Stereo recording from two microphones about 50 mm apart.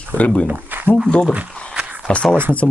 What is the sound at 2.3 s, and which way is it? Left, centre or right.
Speech, right.